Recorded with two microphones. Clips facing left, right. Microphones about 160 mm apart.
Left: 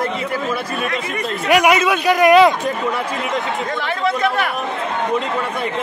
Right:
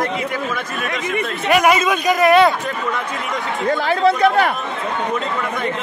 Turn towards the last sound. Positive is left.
turn(degrees=-35)  # may be behind; listen again after turning